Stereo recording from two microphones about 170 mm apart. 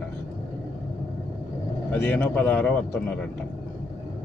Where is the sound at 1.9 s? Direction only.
10° left (ahead or behind).